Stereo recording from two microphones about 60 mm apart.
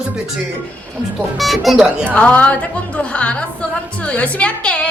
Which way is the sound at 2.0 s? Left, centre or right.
Left.